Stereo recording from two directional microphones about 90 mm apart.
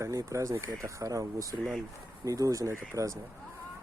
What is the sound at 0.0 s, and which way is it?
Speech, 40° right (ahead or behind).